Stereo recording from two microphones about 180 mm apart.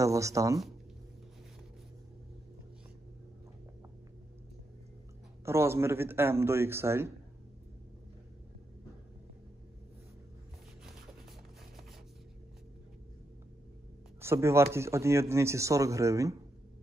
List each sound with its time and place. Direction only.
0.0 s speech: 15° right (ahead or behind)
5.4 s speech: 15° right (ahead or behind)
14.2 s speech: 15° right (ahead or behind)